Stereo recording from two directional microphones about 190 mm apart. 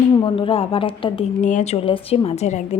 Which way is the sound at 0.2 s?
25° left (ahead or behind).